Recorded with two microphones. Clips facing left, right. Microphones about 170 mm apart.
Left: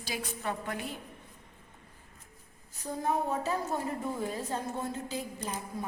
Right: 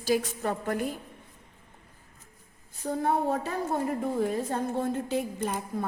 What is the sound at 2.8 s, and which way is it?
A woman's voice, 65° right (ahead or behind).